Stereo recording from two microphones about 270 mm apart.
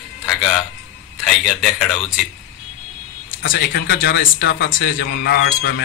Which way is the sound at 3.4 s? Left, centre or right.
Left.